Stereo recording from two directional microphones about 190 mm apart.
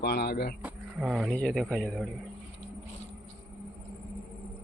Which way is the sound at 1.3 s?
Centre (ahead or behind).